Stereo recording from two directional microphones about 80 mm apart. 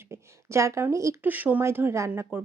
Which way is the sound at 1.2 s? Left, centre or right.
Right.